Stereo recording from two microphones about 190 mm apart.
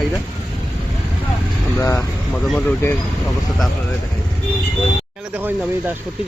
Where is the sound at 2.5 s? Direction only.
5° left (ahead or behind).